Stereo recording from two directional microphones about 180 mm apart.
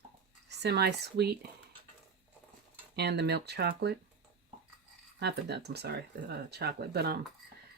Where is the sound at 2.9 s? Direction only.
65° right (ahead or behind).